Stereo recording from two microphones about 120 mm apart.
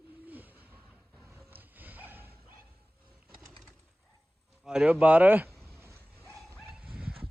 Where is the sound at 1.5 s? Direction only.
15° right (ahead or behind).